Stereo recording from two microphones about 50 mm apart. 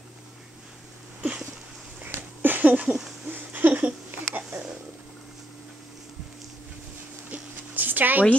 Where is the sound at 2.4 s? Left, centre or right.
Right.